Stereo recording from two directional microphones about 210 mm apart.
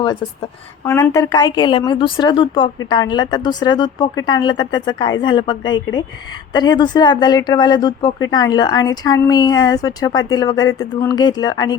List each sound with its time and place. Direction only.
0.9 s speech: 15° left (ahead or behind)